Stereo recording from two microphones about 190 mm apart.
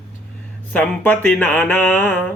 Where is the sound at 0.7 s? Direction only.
10° left (ahead or behind).